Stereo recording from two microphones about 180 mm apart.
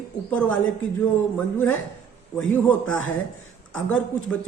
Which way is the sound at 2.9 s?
90° left.